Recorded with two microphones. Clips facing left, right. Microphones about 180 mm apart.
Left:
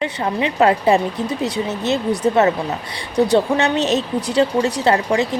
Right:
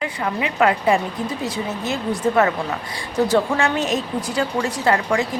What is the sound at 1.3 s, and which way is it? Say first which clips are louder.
Speech: left 4 dB; 70° left (ahead or behind).